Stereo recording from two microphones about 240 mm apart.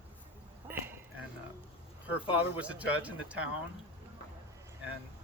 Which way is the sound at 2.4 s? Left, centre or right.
Centre.